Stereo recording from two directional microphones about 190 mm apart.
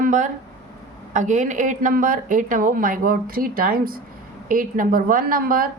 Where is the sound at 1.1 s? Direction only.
40° right (ahead or behind).